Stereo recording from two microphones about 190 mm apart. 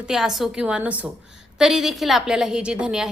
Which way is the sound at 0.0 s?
Centre (ahead or behind).